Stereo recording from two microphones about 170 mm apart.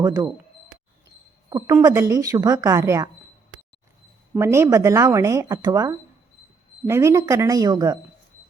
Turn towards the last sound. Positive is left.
turn(degrees=-20)  # may be behind; listen again after turning